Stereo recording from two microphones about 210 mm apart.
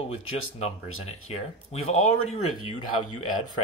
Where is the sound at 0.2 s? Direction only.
75° left (ahead or behind).